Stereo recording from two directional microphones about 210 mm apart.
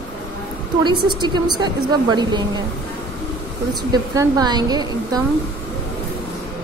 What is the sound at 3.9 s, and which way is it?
A woman's voice, 20° right (ahead or behind).